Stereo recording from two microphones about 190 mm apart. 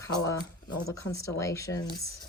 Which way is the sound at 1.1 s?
15° left (ahead or behind).